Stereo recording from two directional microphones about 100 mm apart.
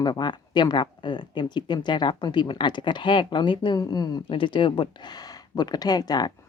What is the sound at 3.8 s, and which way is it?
Speech, 40° left (ahead or behind).